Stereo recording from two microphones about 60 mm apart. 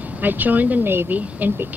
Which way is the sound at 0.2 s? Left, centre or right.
Right.